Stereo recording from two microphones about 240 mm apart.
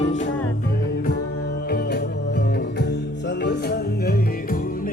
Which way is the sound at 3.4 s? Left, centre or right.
Left.